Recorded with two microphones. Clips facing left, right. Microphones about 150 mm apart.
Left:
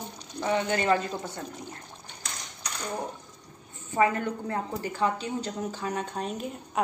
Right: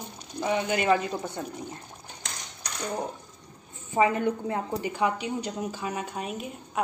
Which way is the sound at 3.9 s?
20° right (ahead or behind).